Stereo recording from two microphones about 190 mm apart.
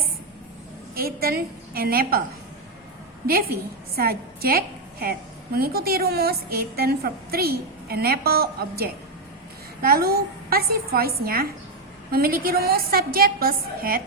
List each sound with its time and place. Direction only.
0.9 s a woman's voice: 50° right (ahead or behind)
3.2 s a woman's voice: 50° right (ahead or behind)